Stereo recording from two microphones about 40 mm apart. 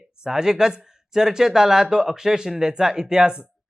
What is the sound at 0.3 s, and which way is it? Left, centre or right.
Speech, centre.